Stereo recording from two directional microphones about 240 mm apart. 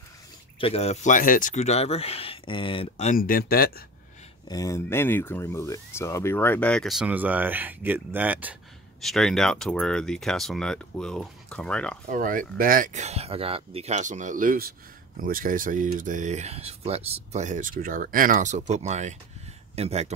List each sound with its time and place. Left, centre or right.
0.6 s speech: left
4.5 s speech: centre
12.1 s speech: right